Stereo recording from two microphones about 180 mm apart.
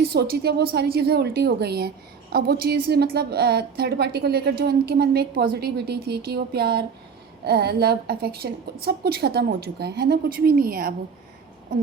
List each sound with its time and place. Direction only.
0.0 s a woman's voice: 60° right (ahead or behind)